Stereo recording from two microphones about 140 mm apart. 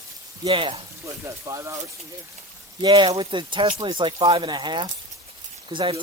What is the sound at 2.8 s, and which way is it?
Speech, 30° right (ahead or behind).